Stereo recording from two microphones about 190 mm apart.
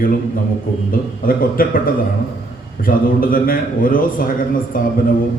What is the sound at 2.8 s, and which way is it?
A man's voice, 50° left (ahead or behind).